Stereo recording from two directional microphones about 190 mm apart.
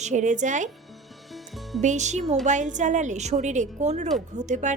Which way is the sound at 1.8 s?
40° right (ahead or behind).